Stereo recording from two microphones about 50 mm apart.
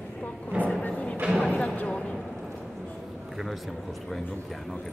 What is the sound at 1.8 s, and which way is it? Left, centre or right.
Speech, left.